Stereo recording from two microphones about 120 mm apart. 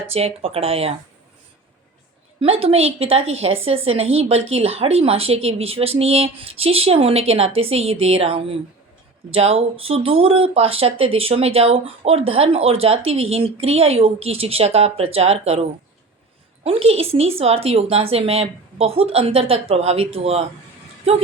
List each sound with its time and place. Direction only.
0.1 s a woman's voice: 55° right (ahead or behind)
2.4 s a woman's voice: 55° right (ahead or behind)
16.6 s a woman's voice: 55° right (ahead or behind)